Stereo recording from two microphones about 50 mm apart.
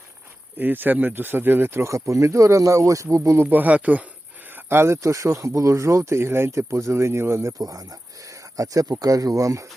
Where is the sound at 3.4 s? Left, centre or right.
Right.